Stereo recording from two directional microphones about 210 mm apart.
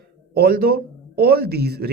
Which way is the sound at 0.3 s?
45° right (ahead or behind).